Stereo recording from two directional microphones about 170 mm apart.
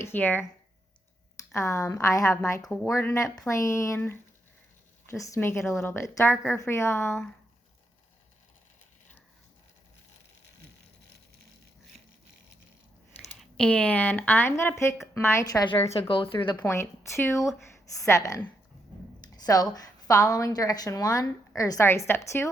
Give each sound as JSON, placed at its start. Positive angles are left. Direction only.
{"t": 0.0, "sound": "speech", "side_deg": 10}
{"t": 1.5, "sound": "speech", "side_deg": 15}
{"t": 2.6, "sound": "speech", "side_deg": 0}
{"t": 2.8, "sound": "speech", "side_deg": 15}
{"t": 13.4, "sound": "speech", "side_deg": 5}
{"t": 15.9, "sound": "speech", "side_deg": 35}
{"t": 16.6, "sound": "a woman's voice", "side_deg": 15}